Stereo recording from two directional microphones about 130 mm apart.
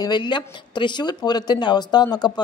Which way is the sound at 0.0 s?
35° left (ahead or behind).